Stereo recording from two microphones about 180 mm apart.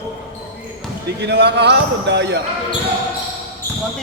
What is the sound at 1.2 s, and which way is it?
Speech, 70° right (ahead or behind).